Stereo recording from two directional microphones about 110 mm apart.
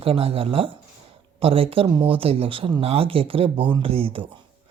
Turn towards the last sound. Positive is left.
turn(degrees=-55)  # may be behind; listen again after turning